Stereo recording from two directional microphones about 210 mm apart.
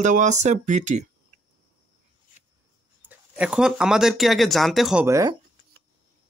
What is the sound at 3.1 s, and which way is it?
Speech, 5° right (ahead or behind).